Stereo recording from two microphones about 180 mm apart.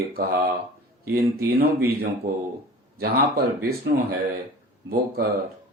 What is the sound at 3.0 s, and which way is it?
Speech, 60° right (ahead or behind).